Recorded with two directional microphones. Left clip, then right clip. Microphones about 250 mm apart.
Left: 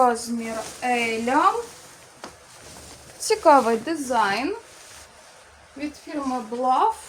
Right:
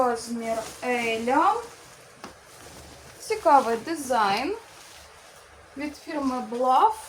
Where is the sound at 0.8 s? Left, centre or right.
Left.